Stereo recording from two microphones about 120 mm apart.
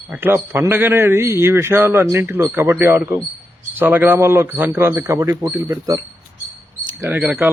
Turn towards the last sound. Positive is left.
turn(degrees=-5)  # may be behind; listen again after turning